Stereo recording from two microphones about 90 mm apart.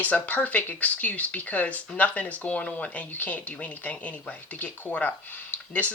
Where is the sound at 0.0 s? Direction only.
15° left (ahead or behind).